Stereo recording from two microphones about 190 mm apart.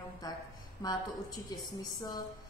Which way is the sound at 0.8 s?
20° left (ahead or behind).